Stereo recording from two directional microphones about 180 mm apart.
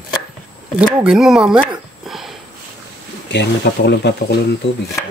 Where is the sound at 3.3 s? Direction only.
70° left (ahead or behind).